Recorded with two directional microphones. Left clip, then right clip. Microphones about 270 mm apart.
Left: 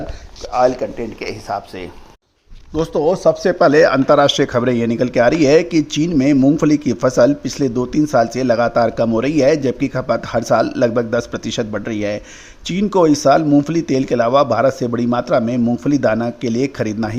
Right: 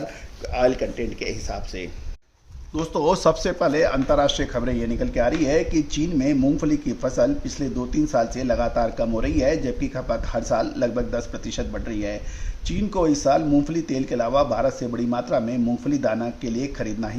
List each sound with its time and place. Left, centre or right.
0.8 s speech: centre
2.7 s speech: left
3.0 s speech: centre
3.6 s a man's voice: left